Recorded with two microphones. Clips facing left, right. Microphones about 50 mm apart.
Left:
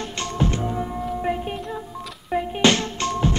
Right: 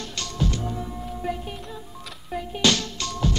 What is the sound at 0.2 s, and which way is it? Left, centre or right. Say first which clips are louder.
Music: left 4 dB; left.